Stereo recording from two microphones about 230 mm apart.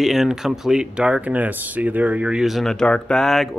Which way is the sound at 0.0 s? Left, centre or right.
Centre.